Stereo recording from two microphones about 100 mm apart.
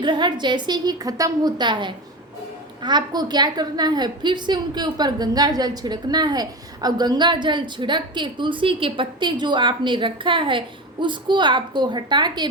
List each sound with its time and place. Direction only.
0.0 s a woman's voice: 50° right (ahead or behind)